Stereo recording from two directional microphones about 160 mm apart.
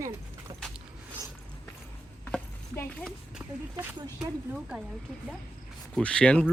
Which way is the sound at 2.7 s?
10° left (ahead or behind).